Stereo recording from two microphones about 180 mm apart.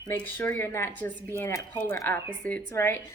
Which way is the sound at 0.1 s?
10° left (ahead or behind).